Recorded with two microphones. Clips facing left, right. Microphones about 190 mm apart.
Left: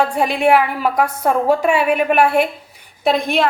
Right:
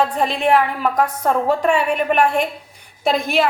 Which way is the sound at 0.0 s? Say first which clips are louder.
Left 2 dB; 10° left (ahead or behind).